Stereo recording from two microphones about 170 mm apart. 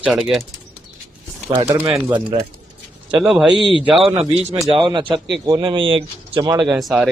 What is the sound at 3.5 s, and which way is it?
Speech, 30° right (ahead or behind).